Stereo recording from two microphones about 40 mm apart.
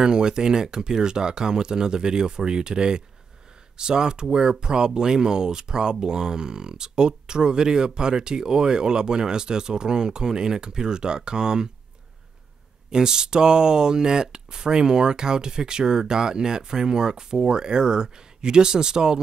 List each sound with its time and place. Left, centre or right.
0.0 s speech: centre
12.9 s speech: centre